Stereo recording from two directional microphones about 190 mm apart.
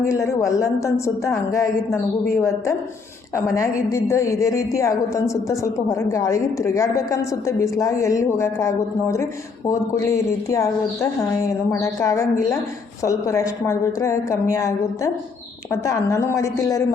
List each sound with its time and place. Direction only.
0.0 s a woman's voice: 15° left (ahead or behind)